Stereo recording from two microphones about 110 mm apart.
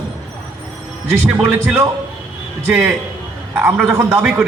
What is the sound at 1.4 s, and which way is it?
A man's voice, 10° right (ahead or behind).